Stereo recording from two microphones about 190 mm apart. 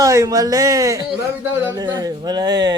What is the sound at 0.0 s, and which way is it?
A man's voice, 20° right (ahead or behind).